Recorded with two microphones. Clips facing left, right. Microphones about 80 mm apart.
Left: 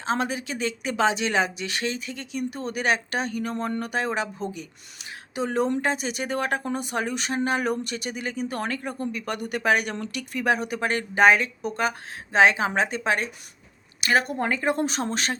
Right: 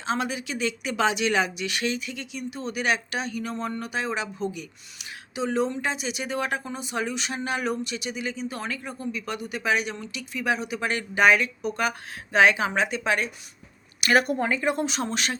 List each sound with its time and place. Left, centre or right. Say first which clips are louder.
0.0 s speech: left 2 dB; left
14.4 s speech: left 1 dB; left